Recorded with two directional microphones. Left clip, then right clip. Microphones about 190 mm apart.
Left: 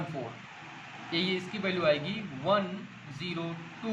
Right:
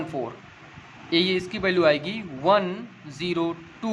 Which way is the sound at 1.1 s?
40° right (ahead or behind).